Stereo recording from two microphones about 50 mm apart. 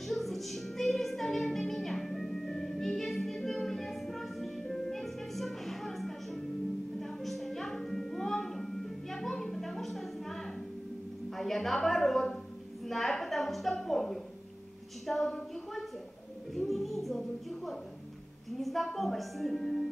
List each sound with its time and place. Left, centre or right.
0.0 s music: centre
11.2 s a sound: centre
16.5 s music: centre